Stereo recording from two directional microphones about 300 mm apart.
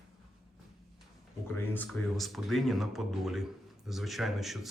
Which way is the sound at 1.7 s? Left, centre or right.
Centre.